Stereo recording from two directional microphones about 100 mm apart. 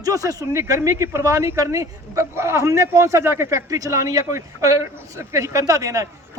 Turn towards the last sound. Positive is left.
turn(degrees=-35)  # may be behind; listen again after turning